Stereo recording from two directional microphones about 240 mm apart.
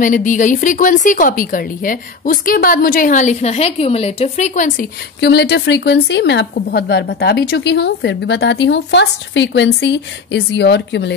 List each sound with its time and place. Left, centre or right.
0.0 s speech: left